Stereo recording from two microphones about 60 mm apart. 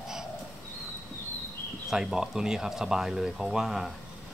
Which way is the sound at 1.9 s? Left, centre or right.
Centre.